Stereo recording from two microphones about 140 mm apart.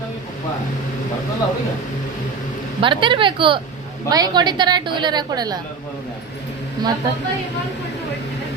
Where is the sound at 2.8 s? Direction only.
35° right (ahead or behind).